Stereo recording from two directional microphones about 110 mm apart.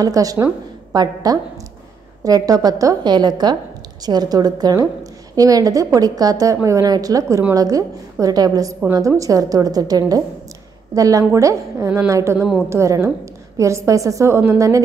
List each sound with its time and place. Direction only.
0.0 s a woman's voice: 35° right (ahead or behind)
12.4 s a woman's voice: 5° left (ahead or behind)
12.6 s a woman's voice: 25° right (ahead or behind)